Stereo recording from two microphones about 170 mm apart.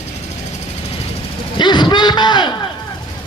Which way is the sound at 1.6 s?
25° left (ahead or behind).